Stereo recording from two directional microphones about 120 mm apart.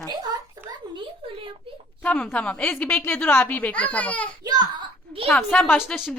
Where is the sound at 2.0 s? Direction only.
10° left (ahead or behind).